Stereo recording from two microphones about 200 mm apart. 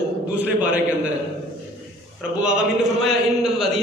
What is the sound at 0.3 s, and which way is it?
Speech, 5° right (ahead or behind).